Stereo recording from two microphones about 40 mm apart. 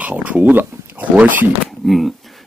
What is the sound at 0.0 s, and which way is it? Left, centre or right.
Speech, right.